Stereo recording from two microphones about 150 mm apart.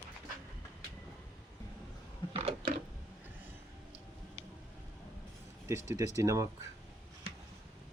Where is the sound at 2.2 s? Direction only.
35° left (ahead or behind).